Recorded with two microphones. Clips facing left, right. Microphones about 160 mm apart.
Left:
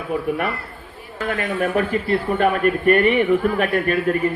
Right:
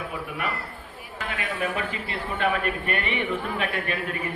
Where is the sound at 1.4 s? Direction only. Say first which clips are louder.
Left 8 dB; 50° left (ahead or behind).